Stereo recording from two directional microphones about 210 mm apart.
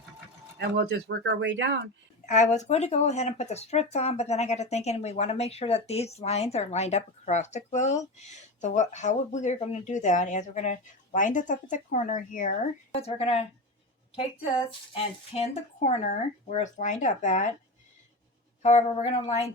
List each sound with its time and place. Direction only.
0.6 s speech: 55° right (ahead or behind)
2.2 s speech: 35° left (ahead or behind)
14.9 s speech: 30° left (ahead or behind)
18.6 s speech: 30° left (ahead or behind)